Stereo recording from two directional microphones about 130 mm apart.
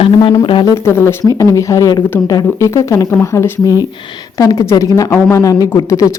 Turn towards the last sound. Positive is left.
turn(degrees=25)  # may be behind; listen again after turning